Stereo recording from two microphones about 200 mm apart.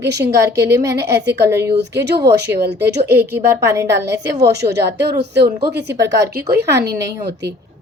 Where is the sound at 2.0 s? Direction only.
55° right (ahead or behind).